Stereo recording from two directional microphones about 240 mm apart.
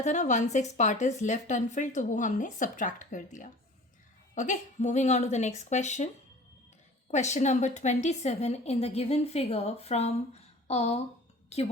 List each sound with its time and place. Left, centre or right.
0.0 s a woman's voice: left
7.1 s a woman's voice: left